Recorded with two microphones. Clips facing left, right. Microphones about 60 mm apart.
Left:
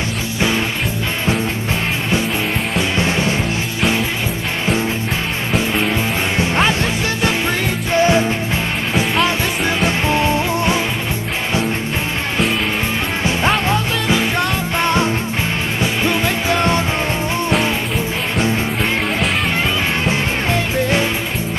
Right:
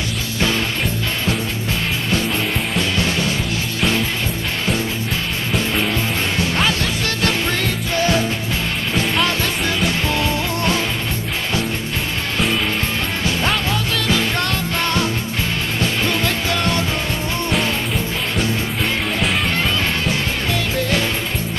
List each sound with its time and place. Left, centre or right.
3.0 s music: left
5.9 s music: left
8.9 s music: centre
9.8 s music: left
13.2 s music: left
20.1 s music: left